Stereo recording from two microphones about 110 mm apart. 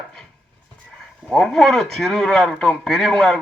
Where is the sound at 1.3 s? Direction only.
Centre (ahead or behind).